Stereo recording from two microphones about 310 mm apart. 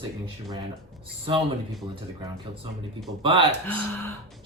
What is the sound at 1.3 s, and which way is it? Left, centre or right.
Speech, centre.